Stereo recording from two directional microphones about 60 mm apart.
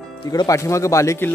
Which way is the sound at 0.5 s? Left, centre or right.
Left.